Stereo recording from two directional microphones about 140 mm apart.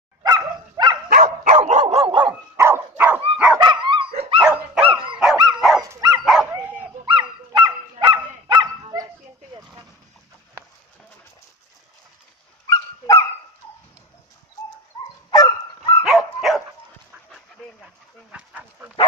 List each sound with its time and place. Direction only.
0.2 s dog: 30° right (ahead or behind)
1.1 s dog: 65° right (ahead or behind); by 2.2 s 45° right (ahead or behind)
2.2 s dog: 20° right (ahead or behind)
3.5 s dog: 35° right (ahead or behind)
4.4 s dog: 5° right (ahead or behind)
4.8 s dog: 35° right (ahead or behind)
5.6 s dog: centre (ahead or behind)
5.9 s dog: 30° right (ahead or behind)
7.1 s honk: 35° right (ahead or behind)
12.6 s dog: 25° left (ahead or behind)
15.3 s dog: 25° left (ahead or behind)
16.0 s dog: 5° right (ahead or behind)